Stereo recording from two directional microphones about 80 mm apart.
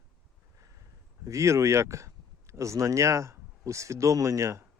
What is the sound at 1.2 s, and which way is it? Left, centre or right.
Speech, right.